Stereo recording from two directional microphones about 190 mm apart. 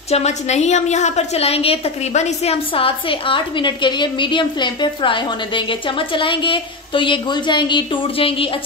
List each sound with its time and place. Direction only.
0.1 s a woman's voice: 35° left (ahead or behind)